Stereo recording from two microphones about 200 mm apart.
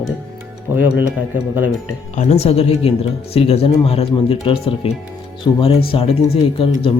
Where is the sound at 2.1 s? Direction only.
35° left (ahead or behind).